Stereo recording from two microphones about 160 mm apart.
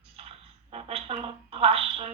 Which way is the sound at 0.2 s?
40° right (ahead or behind).